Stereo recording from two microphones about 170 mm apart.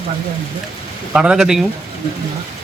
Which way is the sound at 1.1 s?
5° right (ahead or behind).